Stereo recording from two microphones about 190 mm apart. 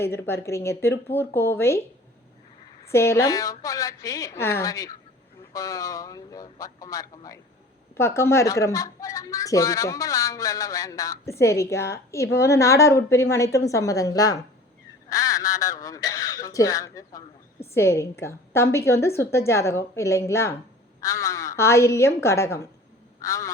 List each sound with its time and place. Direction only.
0.0 s speech: 10° left (ahead or behind)
2.9 s speech: 15° left (ahead or behind)